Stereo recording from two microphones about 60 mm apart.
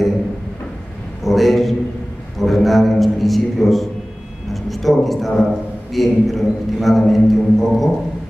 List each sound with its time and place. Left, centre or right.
1.2 s a sound: centre
4.6 s music: centre
5.9 s a man's voice: centre